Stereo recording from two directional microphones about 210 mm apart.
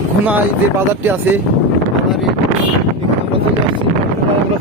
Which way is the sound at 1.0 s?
10° right (ahead or behind).